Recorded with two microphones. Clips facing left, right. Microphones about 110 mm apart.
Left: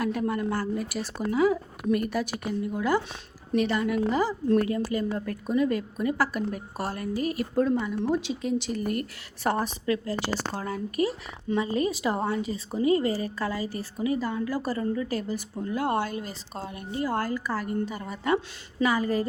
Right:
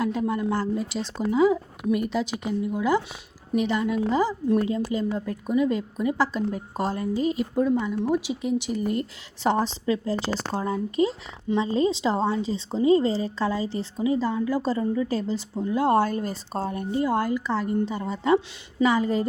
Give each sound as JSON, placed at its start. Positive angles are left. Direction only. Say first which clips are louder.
{"t": 0.0, "sound": "speech", "louder": "right 2 dB", "side_deg": -20}